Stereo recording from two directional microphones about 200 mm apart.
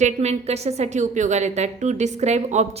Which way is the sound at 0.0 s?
35° right (ahead or behind).